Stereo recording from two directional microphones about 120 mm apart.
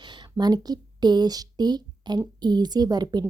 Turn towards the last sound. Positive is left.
turn(degrees=-35)  # may be behind; listen again after turning